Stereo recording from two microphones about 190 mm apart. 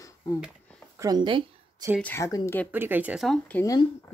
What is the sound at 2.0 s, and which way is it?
Speech, 15° left (ahead or behind).